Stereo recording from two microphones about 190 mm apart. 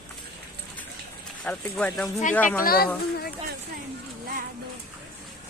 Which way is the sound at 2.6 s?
50° left (ahead or behind).